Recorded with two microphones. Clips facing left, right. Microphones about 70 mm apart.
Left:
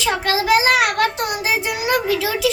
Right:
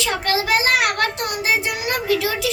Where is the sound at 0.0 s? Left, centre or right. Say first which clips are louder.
Left 2 dB; left.